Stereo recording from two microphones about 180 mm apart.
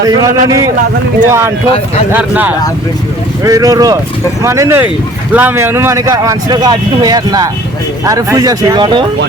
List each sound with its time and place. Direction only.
0.0 s a man's voice: 20° right (ahead or behind)
3.4 s a man's voice: 20° right (ahead or behind)